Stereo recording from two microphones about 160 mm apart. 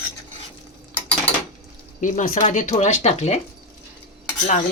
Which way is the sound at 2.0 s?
55° left (ahead or behind).